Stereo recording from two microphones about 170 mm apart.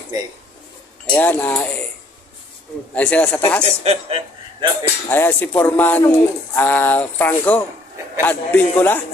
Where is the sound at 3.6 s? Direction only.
40° right (ahead or behind).